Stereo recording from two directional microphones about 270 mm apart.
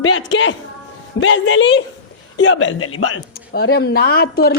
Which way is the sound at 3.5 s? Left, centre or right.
Left.